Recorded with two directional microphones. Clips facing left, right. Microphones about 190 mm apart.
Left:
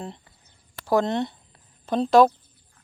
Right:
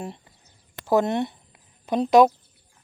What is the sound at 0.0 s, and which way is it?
Speech, 15° right (ahead or behind).